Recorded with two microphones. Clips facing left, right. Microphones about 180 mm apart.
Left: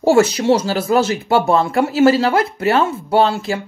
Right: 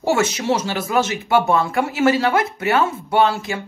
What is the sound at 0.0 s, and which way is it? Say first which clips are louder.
Speech: left 6 dB; 30° left (ahead or behind).